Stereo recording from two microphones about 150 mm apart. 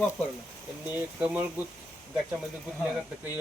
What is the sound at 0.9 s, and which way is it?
Speech, 10° right (ahead or behind).